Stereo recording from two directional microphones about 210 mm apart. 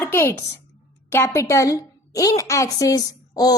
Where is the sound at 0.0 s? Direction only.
10° left (ahead or behind).